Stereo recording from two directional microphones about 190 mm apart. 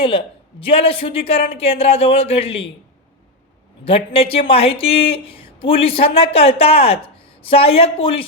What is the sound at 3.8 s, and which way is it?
Speech, 30° left (ahead or behind).